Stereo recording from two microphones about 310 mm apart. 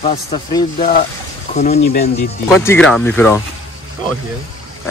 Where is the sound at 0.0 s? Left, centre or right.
Centre.